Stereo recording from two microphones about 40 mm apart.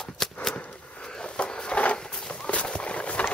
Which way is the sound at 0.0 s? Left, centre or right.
Centre.